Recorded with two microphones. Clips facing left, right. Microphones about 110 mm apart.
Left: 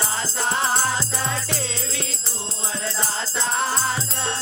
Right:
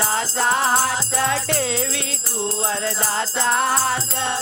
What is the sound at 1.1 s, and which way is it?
Music, 80° right.